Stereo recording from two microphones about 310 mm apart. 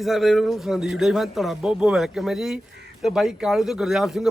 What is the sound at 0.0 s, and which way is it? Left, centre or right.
A man's voice, centre.